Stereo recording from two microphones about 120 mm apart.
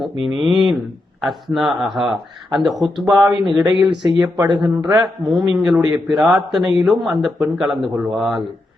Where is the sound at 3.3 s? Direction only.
35° right (ahead or behind).